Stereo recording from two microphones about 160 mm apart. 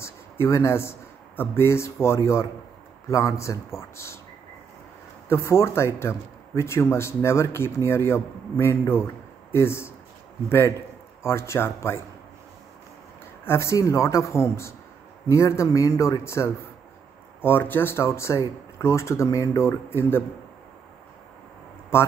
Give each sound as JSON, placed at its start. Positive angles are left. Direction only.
{"t": 0.0, "sound": "a man's voice", "side_deg": 15}
{"t": 5.3, "sound": "speech", "side_deg": 15}
{"t": 11.2, "sound": "speech", "side_deg": 15}
{"t": 13.5, "sound": "a man's voice", "side_deg": 15}
{"t": 21.9, "sound": "speech", "side_deg": 15}